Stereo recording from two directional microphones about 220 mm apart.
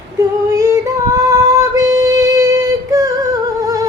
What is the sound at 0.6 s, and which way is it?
Female singing, 15° right (ahead or behind).